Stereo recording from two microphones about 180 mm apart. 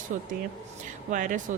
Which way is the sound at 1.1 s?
45° right (ahead or behind).